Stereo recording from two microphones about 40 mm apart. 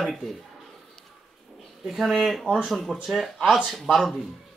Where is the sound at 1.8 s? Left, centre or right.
Centre.